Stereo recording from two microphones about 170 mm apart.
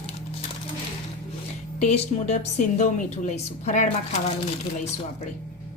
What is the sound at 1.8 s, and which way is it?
A woman's voice, 40° left (ahead or behind).